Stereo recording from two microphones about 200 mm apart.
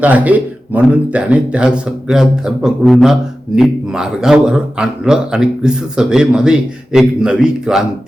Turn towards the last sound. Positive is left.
turn(degrees=-5)  # may be behind; listen again after turning